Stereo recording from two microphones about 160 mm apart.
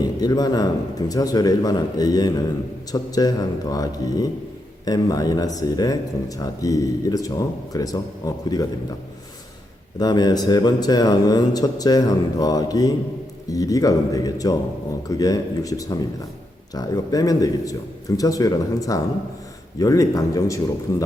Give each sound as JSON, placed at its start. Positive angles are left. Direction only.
{"t": 0.2, "sound": "speech", "side_deg": 25}
{"t": 10.0, "sound": "speech", "side_deg": 25}